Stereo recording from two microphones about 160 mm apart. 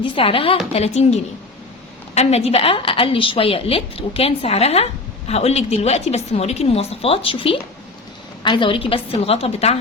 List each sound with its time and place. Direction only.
0.0 s a woman's voice: 35° left (ahead or behind)